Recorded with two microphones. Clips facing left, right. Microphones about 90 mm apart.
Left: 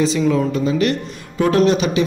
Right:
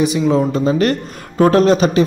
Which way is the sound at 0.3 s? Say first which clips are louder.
Right 3 dB; 35° right (ahead or behind).